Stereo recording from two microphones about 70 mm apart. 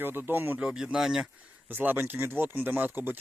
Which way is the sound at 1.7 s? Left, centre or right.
Right.